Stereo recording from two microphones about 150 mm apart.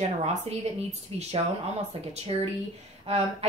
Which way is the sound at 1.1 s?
40° right (ahead or behind).